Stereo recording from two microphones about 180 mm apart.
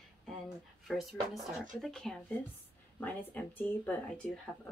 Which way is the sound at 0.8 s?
Centre (ahead or behind).